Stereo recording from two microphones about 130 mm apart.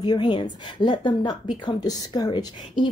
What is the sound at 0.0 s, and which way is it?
Speech, 35° left (ahead or behind).